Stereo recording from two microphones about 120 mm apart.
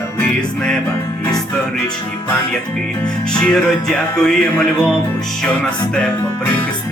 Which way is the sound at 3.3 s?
5° left (ahead or behind).